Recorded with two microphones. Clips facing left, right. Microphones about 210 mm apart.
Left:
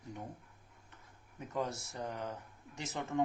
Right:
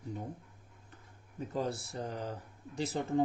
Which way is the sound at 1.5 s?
35° right (ahead or behind).